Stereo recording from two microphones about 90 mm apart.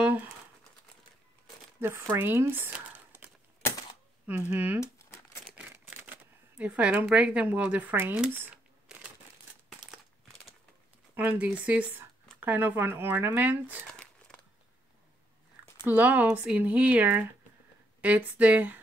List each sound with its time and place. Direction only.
1.8 s speech: 25° right (ahead or behind)
4.5 s speech: 15° right (ahead or behind)
4.9 s crumpling: 30° left (ahead or behind)
6.6 s speech: 15° right (ahead or behind)
11.1 s speech: 15° right (ahead or behind)
13.9 s a sound: 5° left (ahead or behind)
15.8 s speech: 20° right (ahead or behind)